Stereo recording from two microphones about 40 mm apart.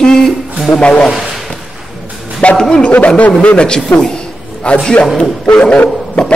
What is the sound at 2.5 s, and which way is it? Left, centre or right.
Speech, centre.